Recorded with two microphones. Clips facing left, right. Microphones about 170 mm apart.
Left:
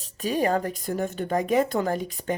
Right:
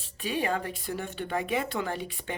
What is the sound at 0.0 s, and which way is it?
Speech, 40° left (ahead or behind).